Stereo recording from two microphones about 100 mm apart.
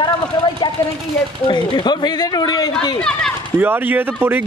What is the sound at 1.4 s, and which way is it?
Speech, 50° left (ahead or behind).